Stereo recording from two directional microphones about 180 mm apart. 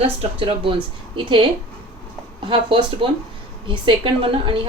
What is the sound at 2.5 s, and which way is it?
A woman's voice, 30° right (ahead or behind).